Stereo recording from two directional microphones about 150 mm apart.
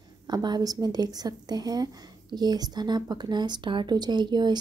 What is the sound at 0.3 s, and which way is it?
A woman's voice, 25° right (ahead or behind).